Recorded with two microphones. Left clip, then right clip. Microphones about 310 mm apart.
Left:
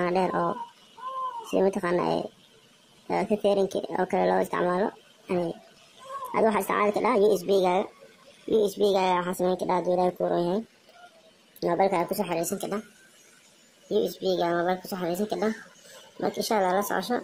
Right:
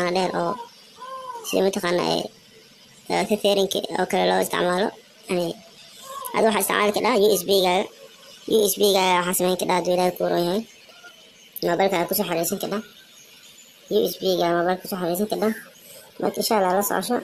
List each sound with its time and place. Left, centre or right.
0.0 s speech: left
11.6 s speech: left
13.8 s speech: left